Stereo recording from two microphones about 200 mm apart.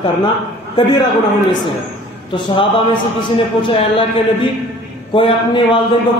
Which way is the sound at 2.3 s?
25° left (ahead or behind).